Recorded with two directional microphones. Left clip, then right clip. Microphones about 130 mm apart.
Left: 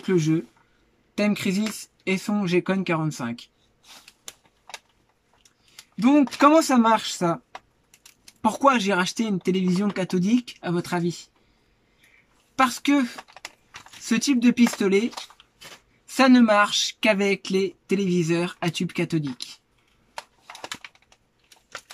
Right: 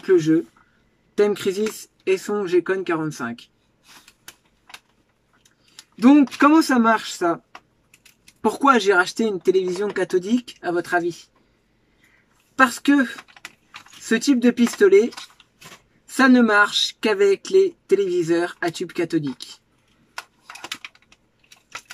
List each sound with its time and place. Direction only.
0.0 s speech: 25° left (ahead or behind)
5.9 s speech: 25° left (ahead or behind)
8.5 s speech: 20° left (ahead or behind)
12.5 s speech: 20° left (ahead or behind)
16.2 s speech: 20° left (ahead or behind)